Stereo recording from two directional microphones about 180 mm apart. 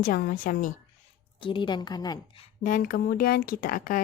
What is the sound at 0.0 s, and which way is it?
Speech, 55° left (ahead or behind).